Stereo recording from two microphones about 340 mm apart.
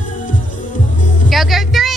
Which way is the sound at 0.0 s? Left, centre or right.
Left.